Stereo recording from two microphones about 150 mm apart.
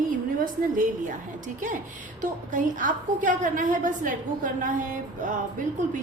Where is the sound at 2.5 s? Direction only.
60° right (ahead or behind).